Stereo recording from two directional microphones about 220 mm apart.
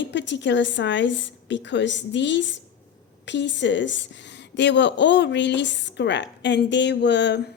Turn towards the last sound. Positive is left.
turn(degrees=50)  # may be behind; listen again after turning